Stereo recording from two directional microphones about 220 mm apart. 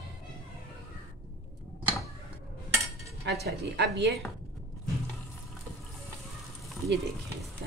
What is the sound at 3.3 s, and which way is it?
Speech, 50° right (ahead or behind).